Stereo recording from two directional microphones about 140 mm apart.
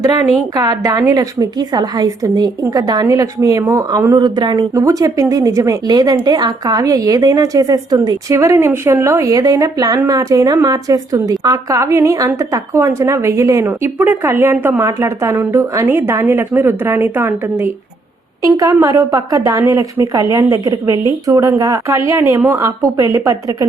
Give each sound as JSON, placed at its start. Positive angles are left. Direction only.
{"t": 0.5, "sound": "a woman's voice", "side_deg": -25}